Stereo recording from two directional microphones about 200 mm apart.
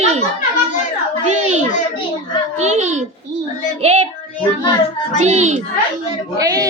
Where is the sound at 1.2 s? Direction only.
35° right (ahead or behind).